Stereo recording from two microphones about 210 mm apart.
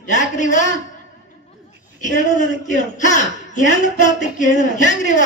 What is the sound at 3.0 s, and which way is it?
Speech, 35° left (ahead or behind).